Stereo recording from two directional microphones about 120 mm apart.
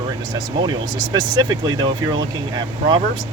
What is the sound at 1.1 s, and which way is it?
Speech, 35° right (ahead or behind).